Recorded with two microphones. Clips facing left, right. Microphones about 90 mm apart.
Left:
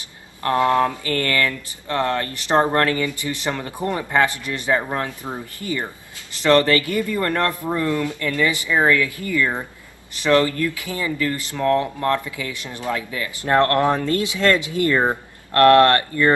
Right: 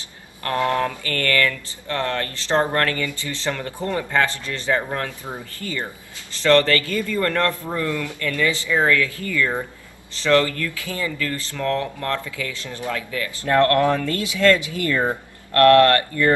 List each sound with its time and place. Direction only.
0.4 s speech: 20° left (ahead or behind)